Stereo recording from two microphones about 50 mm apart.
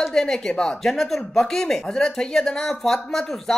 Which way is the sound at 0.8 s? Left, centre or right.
Centre.